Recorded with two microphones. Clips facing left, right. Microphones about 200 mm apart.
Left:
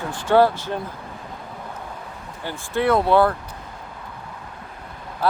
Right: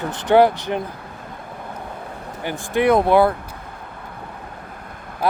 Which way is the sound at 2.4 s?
15° right (ahead or behind).